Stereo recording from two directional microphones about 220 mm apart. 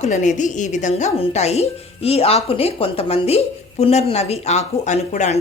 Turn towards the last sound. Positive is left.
turn(degrees=30)  # may be behind; listen again after turning